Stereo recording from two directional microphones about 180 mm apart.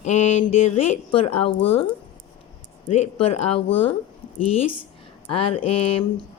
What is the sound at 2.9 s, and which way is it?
Speech, 40° left (ahead or behind).